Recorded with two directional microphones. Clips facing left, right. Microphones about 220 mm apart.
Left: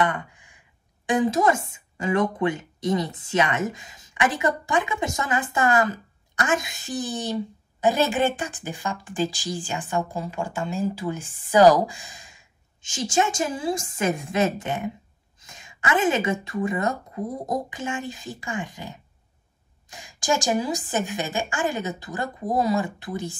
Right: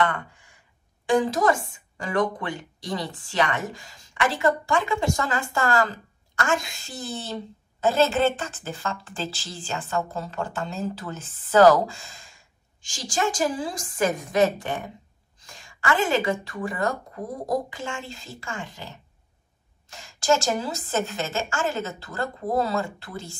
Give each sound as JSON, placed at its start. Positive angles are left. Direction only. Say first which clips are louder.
{"t": 0.0, "sound": "a woman's voice", "louder": "even", "side_deg": 15}